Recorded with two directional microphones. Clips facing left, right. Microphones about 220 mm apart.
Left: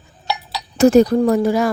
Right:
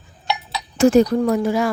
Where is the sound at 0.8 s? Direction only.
40° left (ahead or behind).